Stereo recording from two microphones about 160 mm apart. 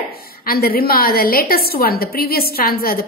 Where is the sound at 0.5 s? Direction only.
70° left (ahead or behind).